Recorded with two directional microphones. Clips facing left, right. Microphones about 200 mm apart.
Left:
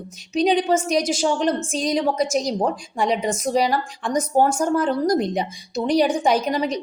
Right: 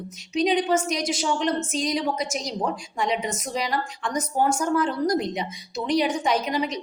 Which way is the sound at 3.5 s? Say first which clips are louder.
Left 10 dB; 55° left (ahead or behind).